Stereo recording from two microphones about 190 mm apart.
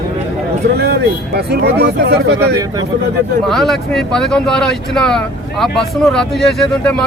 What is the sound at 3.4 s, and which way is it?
Speech, centre (ahead or behind).